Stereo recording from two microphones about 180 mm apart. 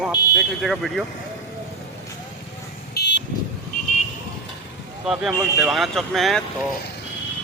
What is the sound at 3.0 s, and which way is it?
Vehicle, 65° left (ahead or behind).